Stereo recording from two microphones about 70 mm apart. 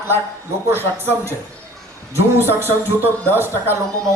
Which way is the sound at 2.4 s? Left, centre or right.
Right.